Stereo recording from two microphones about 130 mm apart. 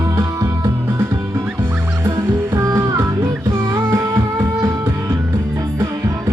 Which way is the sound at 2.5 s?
20° right (ahead or behind).